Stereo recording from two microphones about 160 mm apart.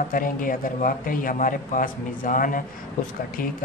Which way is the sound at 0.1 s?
60° left (ahead or behind).